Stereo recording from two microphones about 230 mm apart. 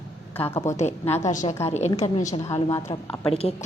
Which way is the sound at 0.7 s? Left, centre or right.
Left.